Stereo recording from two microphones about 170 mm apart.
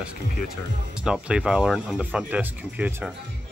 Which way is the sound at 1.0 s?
5° right (ahead or behind).